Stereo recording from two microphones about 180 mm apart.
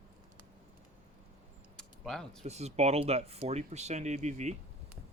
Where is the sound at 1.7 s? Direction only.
5° left (ahead or behind).